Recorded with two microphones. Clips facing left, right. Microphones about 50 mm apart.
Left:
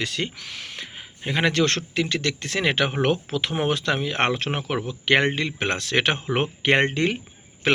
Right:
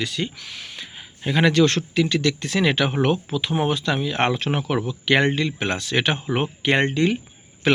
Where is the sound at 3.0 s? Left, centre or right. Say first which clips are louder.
Right 1 dB; left.